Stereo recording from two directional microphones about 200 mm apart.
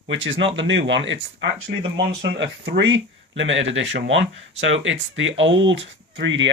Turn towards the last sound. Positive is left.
turn(degrees=-65)  # may be behind; listen again after turning